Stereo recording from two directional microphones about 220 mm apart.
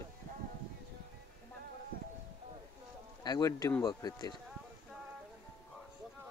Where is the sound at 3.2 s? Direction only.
15° left (ahead or behind).